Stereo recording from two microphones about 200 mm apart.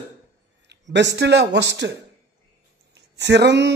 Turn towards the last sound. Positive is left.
turn(degrees=-60)  # may be behind; listen again after turning